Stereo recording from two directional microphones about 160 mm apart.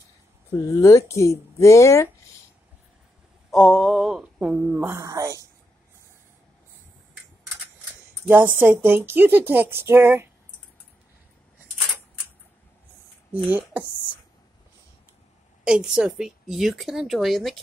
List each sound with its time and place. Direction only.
0.6 s speech: 20° left (ahead or behind)
3.4 s speech: centre (ahead or behind); by 5.5 s 20° right (ahead or behind)
8.3 s speech: 10° right (ahead or behind)
13.3 s speech: 10° right (ahead or behind)
15.6 s speech: 5° right (ahead or behind)